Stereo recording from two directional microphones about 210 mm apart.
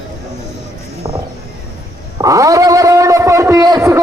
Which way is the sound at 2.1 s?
15° right (ahead or behind).